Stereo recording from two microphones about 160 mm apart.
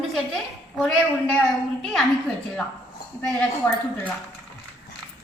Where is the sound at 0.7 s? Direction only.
10° left (ahead or behind).